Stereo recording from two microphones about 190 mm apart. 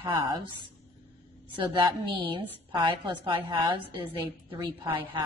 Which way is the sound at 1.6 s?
25° right (ahead or behind).